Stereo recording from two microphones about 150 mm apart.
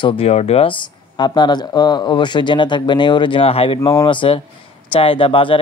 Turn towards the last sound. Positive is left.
turn(degrees=35)  # may be behind; listen again after turning